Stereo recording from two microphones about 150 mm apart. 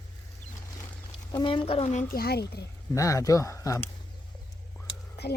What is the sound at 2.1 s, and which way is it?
Speech, 90° left.